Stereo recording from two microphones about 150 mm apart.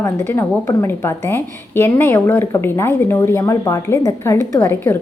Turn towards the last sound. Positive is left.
turn(degrees=15)  # may be behind; listen again after turning